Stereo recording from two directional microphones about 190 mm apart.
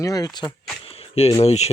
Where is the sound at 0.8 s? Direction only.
30° left (ahead or behind).